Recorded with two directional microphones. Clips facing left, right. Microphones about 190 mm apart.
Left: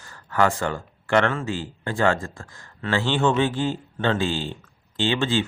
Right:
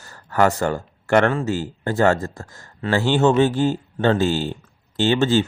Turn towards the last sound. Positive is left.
turn(degrees=-40)  # may be behind; listen again after turning